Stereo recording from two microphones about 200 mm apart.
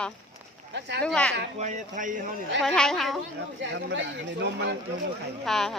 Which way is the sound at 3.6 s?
65° right (ahead or behind).